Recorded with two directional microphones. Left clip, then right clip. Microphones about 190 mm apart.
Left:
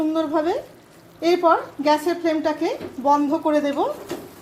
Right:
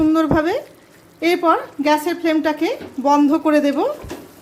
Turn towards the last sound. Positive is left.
turn(degrees=-35)  # may be behind; listen again after turning